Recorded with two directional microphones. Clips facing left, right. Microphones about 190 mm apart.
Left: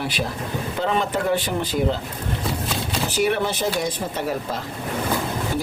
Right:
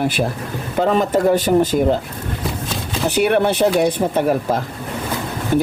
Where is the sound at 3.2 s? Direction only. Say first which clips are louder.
Right 7 dB; 60° right (ahead or behind).